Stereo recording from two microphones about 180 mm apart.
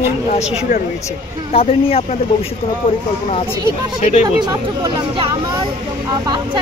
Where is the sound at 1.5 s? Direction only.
35° left (ahead or behind).